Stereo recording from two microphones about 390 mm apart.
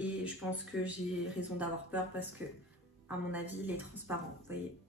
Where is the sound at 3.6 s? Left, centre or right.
Centre.